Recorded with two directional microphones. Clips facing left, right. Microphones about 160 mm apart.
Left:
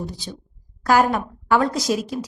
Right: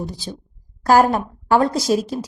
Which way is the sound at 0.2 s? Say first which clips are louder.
Right 3 dB; 30° right (ahead or behind).